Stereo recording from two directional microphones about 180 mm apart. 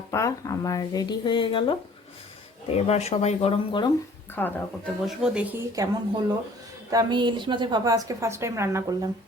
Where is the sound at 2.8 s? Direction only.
35° left (ahead or behind).